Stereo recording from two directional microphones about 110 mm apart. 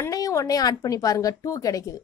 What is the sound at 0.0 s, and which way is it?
A woman's voice, 30° left (ahead or behind).